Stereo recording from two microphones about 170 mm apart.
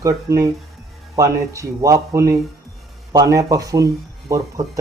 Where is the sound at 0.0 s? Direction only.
20° right (ahead or behind).